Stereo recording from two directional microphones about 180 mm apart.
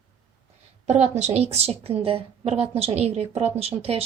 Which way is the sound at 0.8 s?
40° right (ahead or behind).